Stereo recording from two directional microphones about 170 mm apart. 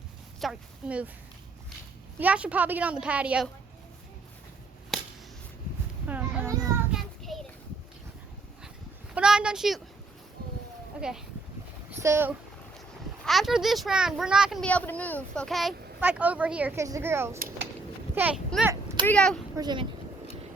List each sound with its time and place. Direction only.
0.3 s speech: 5° right (ahead or behind)
2.1 s speech: 10° right (ahead or behind)
4.9 s a sound: centre (ahead or behind)
6.1 s children playing: 10° right (ahead or behind)
6.9 s child singing: centre (ahead or behind)
9.1 s speech: 5° right (ahead or behind)
11.0 s a child's voice: 5° right (ahead or behind)
13.2 s a child's voice: centre (ahead or behind)
14.7 s a child's voice: 10° left (ahead or behind)
19.5 s speech: 25° right (ahead or behind)